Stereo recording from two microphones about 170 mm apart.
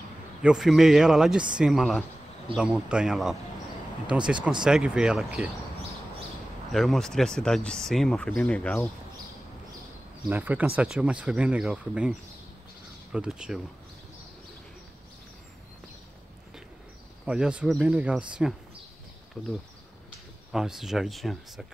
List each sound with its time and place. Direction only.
0.4 s speech: 5° right (ahead or behind)
6.7 s speech: centre (ahead or behind)
10.3 s speech: 10° right (ahead or behind)
17.3 s speech: 5° right (ahead or behind)
20.5 s speech: centre (ahead or behind)